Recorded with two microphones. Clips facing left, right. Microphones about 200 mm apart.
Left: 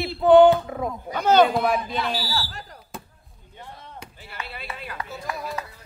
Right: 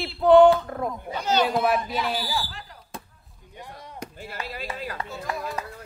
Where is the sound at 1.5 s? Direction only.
Centre (ahead or behind).